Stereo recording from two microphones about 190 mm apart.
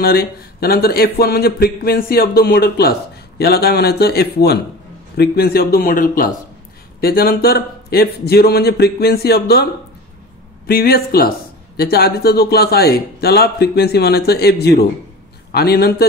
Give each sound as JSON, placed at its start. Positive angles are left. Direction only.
{"t": 0.0, "sound": "a man's voice", "side_deg": 55}
{"t": 10.7, "sound": "a man's voice", "side_deg": 50}